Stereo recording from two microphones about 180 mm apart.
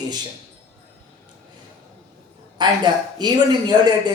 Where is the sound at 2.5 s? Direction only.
25° right (ahead or behind).